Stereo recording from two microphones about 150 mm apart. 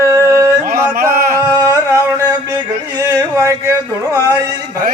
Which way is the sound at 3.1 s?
20° right (ahead or behind).